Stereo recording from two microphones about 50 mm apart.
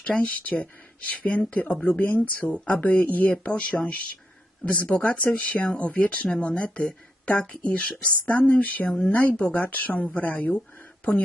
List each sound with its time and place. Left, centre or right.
0.0 s speech: left
8.9 s speech: centre
9.1 s speech: left